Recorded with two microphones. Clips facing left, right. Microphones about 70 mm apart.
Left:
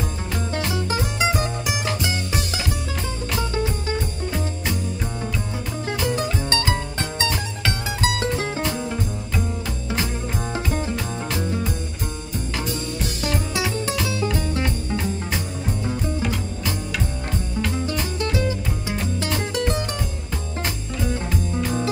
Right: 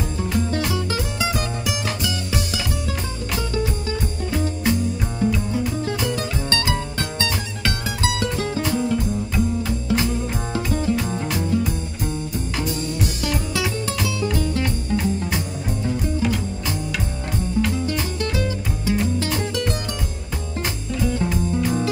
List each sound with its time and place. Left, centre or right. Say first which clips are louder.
0.7 s music: even; left
5.9 s music: even; left
10.5 s music: right 5 dB; left
13.2 s music: left 3 dB; left
18.3 s music: left 1 dB; left
21.0 s music: right 4 dB; left